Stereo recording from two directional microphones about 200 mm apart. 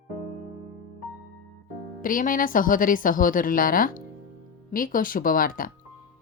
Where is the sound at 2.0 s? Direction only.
45° left (ahead or behind).